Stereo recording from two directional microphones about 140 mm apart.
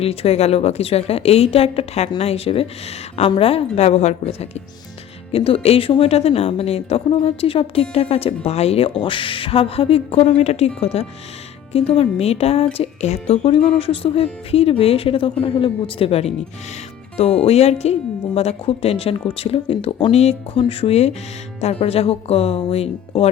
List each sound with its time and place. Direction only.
0.0 s speech: 45° left (ahead or behind)
17.4 s speech: 50° left (ahead or behind)